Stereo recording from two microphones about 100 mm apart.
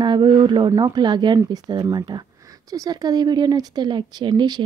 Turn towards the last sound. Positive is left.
turn(degrees=-45)  # may be behind; listen again after turning